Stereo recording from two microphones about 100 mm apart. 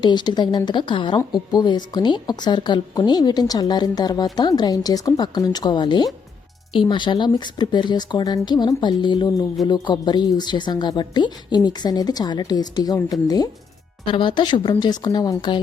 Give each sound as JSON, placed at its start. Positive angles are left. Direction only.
{"t": 0.0, "sound": "a woman's voice", "side_deg": 45}
{"t": 14.1, "sound": "a woman's voice", "side_deg": 55}